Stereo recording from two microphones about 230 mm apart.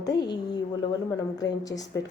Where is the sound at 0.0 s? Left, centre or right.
Centre.